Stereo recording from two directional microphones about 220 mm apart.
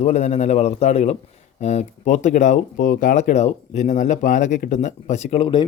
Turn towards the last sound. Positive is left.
turn(degrees=20)  # may be behind; listen again after turning